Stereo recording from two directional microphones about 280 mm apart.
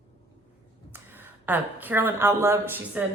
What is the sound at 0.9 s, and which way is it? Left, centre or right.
A woman's voice, centre.